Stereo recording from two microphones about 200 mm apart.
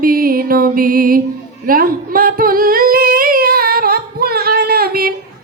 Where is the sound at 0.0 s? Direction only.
45° right (ahead or behind).